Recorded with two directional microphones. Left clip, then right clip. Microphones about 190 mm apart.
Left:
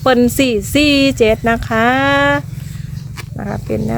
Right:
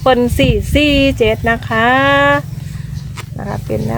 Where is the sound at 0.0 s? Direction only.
35° left (ahead or behind).